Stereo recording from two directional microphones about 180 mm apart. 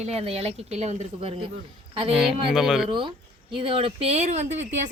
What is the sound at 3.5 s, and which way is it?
Speech, 30° right (ahead or behind).